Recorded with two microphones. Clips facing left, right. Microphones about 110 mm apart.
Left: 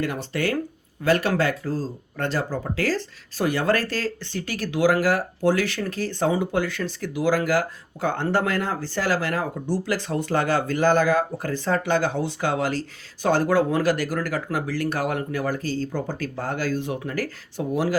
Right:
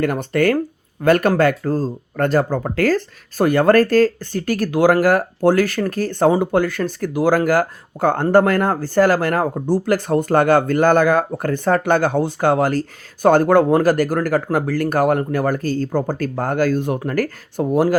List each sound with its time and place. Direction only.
0.0 s speech: 50° right (ahead or behind)